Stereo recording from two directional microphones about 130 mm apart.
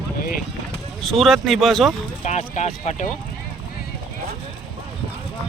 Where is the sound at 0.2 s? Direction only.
90° left.